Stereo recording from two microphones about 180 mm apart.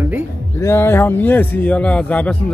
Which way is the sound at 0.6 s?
15° left (ahead or behind).